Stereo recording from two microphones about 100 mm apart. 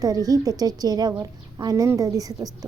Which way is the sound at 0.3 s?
40° right (ahead or behind).